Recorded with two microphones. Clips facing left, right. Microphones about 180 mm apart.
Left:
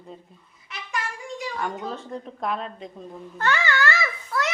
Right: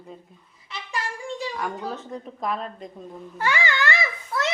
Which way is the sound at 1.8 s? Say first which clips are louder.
Even; centre (ahead or behind).